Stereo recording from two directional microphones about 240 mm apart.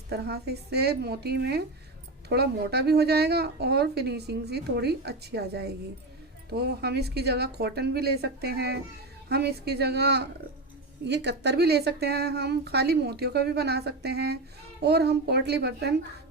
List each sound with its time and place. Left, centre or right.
0.1 s a woman's voice: right